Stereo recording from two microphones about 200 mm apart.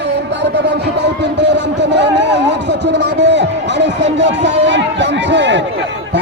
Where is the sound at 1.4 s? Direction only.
60° right (ahead or behind).